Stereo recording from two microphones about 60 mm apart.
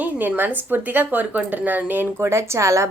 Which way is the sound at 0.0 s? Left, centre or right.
Right.